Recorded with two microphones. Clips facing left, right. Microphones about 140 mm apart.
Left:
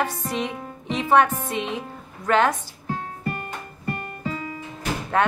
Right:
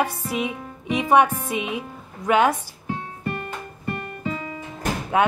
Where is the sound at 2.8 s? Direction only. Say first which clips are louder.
Even; 40° left (ahead or behind).